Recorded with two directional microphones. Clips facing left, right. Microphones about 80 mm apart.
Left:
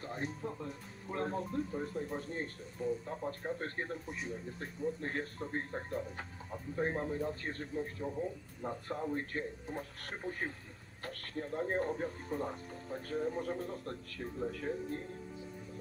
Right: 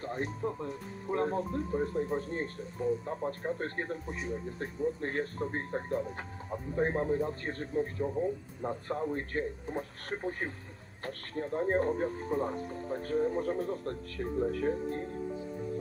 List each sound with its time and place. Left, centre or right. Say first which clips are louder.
0.0 s speech: right 5 dB; right